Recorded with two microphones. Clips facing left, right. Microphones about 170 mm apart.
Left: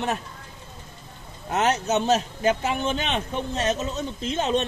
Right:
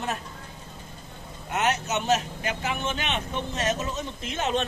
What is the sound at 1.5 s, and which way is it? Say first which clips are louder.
A man's voice: left 4 dB; 35° left (ahead or behind).